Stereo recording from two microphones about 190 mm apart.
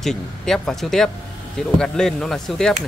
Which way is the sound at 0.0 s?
Centre (ahead or behind).